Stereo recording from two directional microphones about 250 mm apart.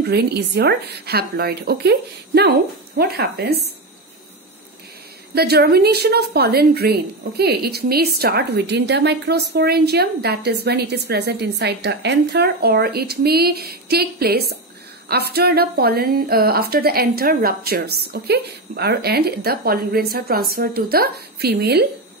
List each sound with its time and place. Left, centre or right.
0.0 s a woman's voice: right
5.3 s a woman's voice: right